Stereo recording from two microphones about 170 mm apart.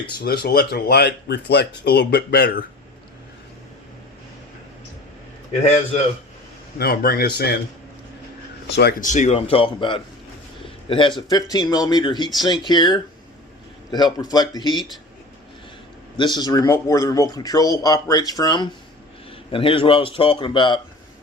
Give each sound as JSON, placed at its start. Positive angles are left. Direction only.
{"t": 0.3, "sound": "speech", "side_deg": 70}
{"t": 6.7, "sound": "speech", "side_deg": 65}
{"t": 8.7, "sound": "speech", "side_deg": 75}
{"t": 9.0, "sound": "a man's voice", "side_deg": 45}
{"t": 16.1, "sound": "a man's voice", "side_deg": 25}